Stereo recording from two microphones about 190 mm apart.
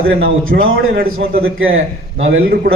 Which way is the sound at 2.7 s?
55° right (ahead or behind).